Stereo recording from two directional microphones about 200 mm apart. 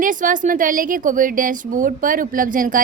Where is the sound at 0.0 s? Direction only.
40° right (ahead or behind).